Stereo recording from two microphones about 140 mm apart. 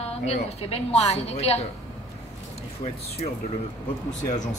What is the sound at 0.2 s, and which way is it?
A woman's voice, 50° left (ahead or behind).